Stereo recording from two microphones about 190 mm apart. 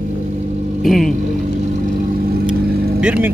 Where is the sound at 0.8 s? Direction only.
Centre (ahead or behind).